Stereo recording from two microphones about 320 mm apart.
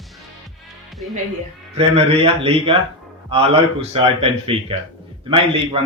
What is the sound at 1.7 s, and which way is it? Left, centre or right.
Speech, centre.